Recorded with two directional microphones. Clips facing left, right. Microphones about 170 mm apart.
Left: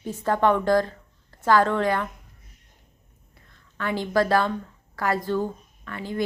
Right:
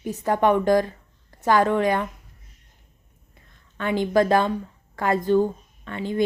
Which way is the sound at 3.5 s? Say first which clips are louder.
Right 3 dB; 20° right (ahead or behind).